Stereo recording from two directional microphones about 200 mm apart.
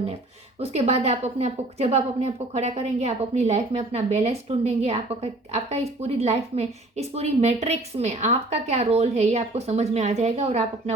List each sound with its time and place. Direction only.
0.6 s a woman's voice: 30° right (ahead or behind)